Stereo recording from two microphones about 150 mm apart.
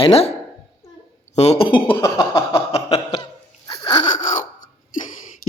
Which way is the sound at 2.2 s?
30° left (ahead or behind).